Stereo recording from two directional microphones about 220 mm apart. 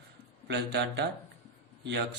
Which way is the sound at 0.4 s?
50° right (ahead or behind).